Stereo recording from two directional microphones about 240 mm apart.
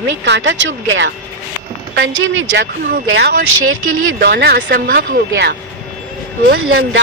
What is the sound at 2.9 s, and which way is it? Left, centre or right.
Speech, right.